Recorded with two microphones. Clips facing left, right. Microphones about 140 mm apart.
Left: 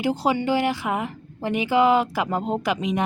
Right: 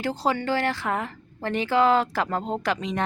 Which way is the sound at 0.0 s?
15° left (ahead or behind).